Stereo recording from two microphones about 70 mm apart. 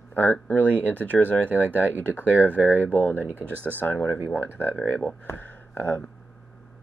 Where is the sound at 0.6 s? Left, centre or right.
Right.